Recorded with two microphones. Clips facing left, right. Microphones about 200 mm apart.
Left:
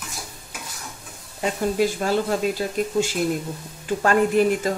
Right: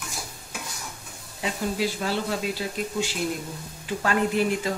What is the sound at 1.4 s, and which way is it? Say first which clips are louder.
Speech: left 5 dB; 45° left (ahead or behind).